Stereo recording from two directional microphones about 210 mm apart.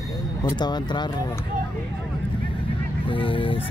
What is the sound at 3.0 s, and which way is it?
Speech, 25° left (ahead or behind).